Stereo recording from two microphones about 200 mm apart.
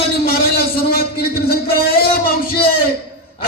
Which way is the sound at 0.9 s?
50° left (ahead or behind).